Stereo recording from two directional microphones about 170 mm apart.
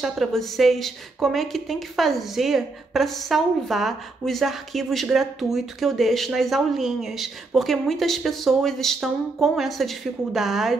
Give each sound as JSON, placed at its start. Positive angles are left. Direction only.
{"t": 0.0, "sound": "a woman's voice", "side_deg": 0}